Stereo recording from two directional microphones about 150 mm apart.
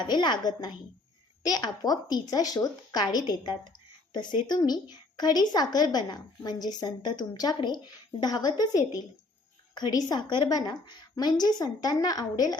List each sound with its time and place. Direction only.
0.0 s speech: 30° left (ahead or behind)